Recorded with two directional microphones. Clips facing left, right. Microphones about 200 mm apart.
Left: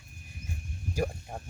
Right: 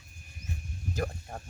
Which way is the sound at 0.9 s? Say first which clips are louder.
Left 2 dB; 10° left (ahead or behind).